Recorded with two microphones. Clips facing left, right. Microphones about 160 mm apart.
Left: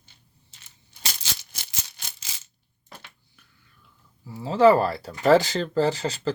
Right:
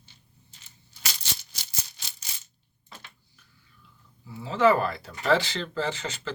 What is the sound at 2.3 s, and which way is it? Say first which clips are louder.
Coin: left 1 dB; 90° left.